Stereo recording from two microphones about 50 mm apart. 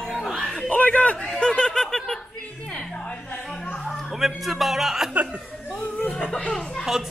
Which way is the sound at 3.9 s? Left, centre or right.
Centre.